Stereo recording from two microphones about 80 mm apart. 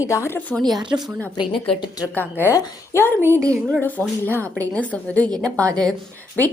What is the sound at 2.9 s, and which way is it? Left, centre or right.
A woman's voice, left.